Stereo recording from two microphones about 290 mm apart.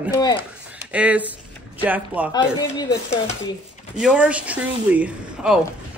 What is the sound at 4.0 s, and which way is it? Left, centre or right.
Speech, centre.